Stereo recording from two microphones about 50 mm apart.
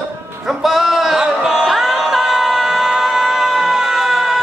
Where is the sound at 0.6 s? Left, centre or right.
Centre.